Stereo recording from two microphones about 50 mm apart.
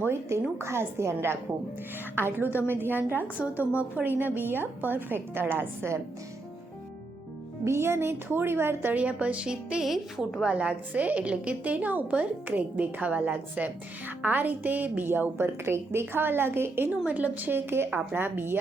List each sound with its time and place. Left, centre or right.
0.0 s a woman's voice: right
2.1 s a woman's voice: right
7.6 s a woman's voice: right
8.9 s a woman's voice: right
9.8 s a woman's voice: centre
10.5 s a woman's voice: right
14.2 s a woman's voice: right
15.4 s a woman's voice: right
17.1 s a woman's voice: right